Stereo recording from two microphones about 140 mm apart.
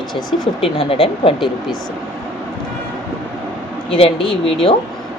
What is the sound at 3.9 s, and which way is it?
Speech, 40° left (ahead or behind).